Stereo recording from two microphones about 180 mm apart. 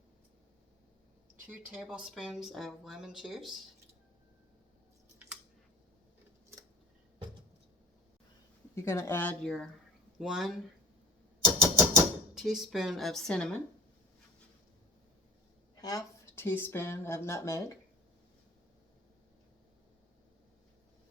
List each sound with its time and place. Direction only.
1.5 s speech: 5° right (ahead or behind)
8.7 s speech: 15° left (ahead or behind); by 10.5 s centre (ahead or behind)
11.6 s a sound: 15° right (ahead or behind)
12.3 s speech: centre (ahead or behind)
15.8 s speech: 20° left (ahead or behind)